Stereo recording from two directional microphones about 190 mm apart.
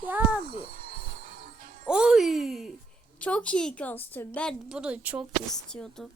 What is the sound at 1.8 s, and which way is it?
A woman's voice, 5° right (ahead or behind).